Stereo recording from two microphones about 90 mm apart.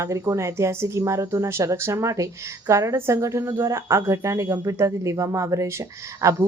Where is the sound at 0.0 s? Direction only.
35° right (ahead or behind).